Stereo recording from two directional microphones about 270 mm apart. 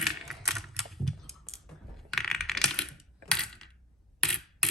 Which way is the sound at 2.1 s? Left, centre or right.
Centre.